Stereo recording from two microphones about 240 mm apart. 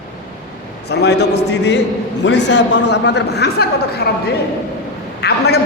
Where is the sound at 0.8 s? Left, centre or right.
Left.